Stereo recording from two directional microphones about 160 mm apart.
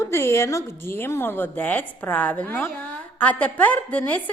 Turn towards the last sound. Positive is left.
turn(degrees=10)  # may be behind; listen again after turning